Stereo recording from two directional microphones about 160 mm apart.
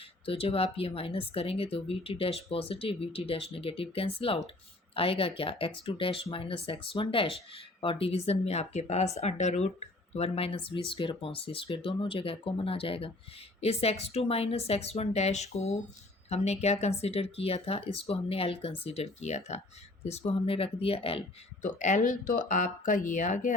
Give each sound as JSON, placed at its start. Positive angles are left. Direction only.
{"t": 0.3, "sound": "speech", "side_deg": 35}
{"t": 21.6, "sound": "speech", "side_deg": 50}